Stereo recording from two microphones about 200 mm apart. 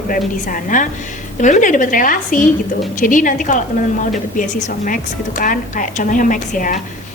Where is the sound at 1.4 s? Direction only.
40° left (ahead or behind).